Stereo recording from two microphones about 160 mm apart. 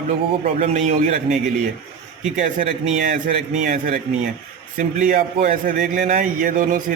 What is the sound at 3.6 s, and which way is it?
Speech, 50° right (ahead or behind).